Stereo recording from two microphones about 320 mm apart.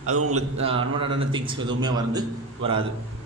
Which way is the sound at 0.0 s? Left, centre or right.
Right.